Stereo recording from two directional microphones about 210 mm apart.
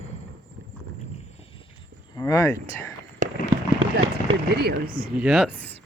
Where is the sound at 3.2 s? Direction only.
40° right (ahead or behind).